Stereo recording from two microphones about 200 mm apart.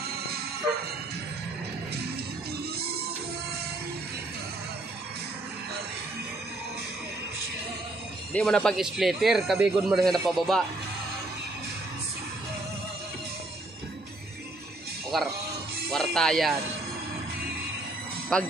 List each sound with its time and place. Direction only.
8.3 s a man's voice: 5° left (ahead or behind)
15.9 s music: centre (ahead or behind)
18.3 s a man's voice: 5° left (ahead or behind)